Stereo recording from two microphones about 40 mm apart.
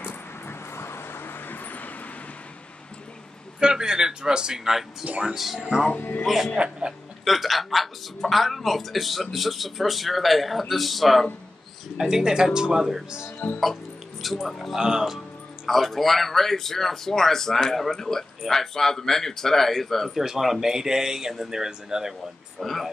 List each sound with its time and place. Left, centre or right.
0.0 s vehicle: left
3.5 s a man's voice: centre
5.2 s a woman's voice: centre
6.5 s speech: right
7.2 s a woman's voice: centre
12.0 s speech: centre
13.4 s speech: left
14.2 s a woman's voice: centre
14.8 s speech: centre
15.6 s a man's voice: centre
20.2 s speech: centre
22.6 s a woman's voice: centre